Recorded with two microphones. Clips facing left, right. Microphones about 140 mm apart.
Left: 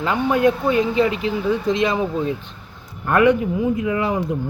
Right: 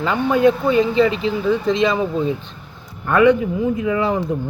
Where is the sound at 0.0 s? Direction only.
10° left (ahead or behind).